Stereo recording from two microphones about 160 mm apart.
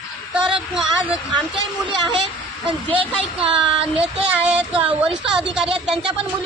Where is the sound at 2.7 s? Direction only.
35° right (ahead or behind).